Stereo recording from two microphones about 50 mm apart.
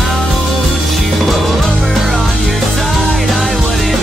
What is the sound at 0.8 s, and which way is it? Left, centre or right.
Music, centre.